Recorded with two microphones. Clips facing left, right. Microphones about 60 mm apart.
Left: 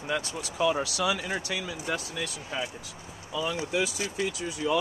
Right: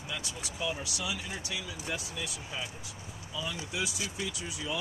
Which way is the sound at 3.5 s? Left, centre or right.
Left.